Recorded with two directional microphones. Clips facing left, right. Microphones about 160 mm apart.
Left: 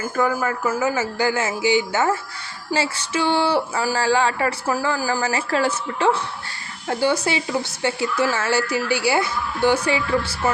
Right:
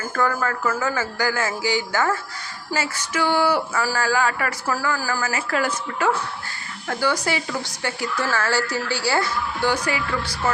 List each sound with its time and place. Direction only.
0.2 s speech: 15° left (ahead or behind)
5.2 s a woman's voice: 30° left (ahead or behind)